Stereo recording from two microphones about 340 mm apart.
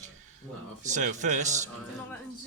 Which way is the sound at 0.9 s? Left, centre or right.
Right.